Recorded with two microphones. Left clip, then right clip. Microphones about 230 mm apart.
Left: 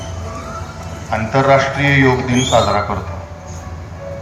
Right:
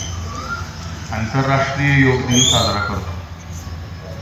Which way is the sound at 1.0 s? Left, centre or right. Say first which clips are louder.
Left 7 dB; left.